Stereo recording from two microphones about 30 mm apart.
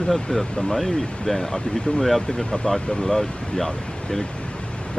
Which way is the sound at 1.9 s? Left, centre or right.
Left.